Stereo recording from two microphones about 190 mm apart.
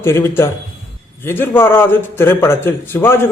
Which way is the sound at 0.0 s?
15° left (ahead or behind).